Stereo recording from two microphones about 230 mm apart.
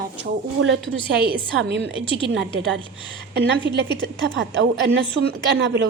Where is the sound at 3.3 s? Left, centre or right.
Right.